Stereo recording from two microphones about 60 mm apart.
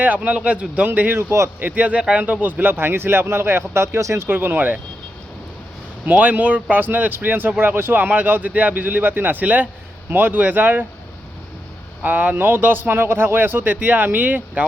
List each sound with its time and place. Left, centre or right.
0.0 s a man's voice: right
0.9 s a man's voice: right
4.3 s a man's voice: right
6.1 s speech: right
12.0 s speech: right